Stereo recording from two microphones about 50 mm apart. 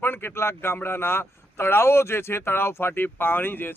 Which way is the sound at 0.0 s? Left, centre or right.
Left.